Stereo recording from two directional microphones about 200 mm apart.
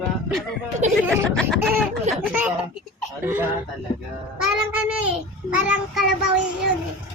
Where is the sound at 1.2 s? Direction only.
5° left (ahead or behind).